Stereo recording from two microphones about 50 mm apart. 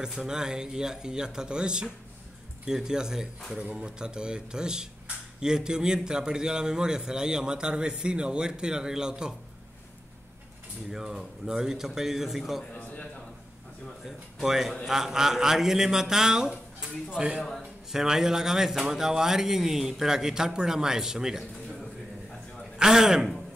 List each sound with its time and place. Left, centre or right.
0.0 s speech: centre
10.9 s speech: centre
14.0 s speech: centre
22.8 s speech: centre